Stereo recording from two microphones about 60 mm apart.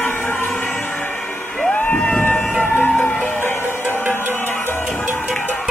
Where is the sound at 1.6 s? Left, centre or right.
Left.